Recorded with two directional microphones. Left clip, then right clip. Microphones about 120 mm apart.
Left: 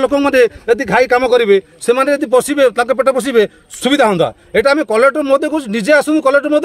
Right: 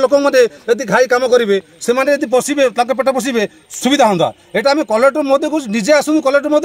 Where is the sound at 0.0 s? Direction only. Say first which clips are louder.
Right 1 dB; 25° left (ahead or behind).